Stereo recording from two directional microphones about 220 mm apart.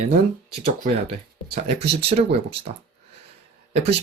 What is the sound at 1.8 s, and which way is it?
Speech, 25° right (ahead or behind).